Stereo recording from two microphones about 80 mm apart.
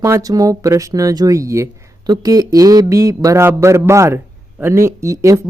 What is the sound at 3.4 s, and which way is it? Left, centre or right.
A man's voice, right.